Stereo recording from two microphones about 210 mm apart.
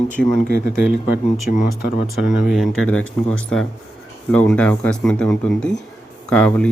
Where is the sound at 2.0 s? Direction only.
Centre (ahead or behind).